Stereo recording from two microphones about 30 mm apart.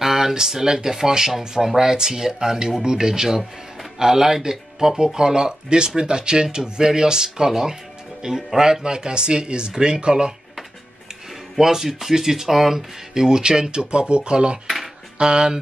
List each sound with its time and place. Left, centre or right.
0.0 s a sound: centre
0.3 s speech: centre
11.5 s speech: centre
12.7 s speech: right